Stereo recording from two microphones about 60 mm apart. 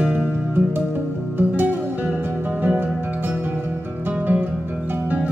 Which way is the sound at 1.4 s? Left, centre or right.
Right.